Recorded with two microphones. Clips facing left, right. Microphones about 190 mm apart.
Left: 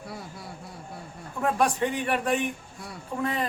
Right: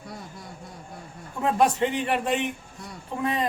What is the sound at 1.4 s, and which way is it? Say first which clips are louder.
A man's voice: right 2 dB; 20° right (ahead or behind).